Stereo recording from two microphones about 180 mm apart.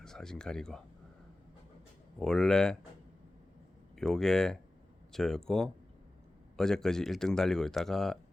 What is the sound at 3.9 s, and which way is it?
Speech, centre (ahead or behind).